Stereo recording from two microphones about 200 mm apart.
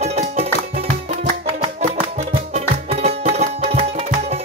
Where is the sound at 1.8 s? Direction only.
35° right (ahead or behind).